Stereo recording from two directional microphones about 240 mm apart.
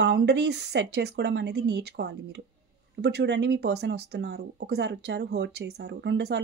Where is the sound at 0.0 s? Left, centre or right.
Right.